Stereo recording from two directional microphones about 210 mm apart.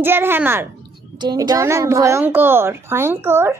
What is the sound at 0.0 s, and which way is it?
A child's voice, 10° right (ahead or behind).